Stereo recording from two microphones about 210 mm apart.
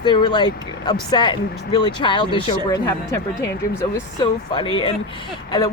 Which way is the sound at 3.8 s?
20° left (ahead or behind).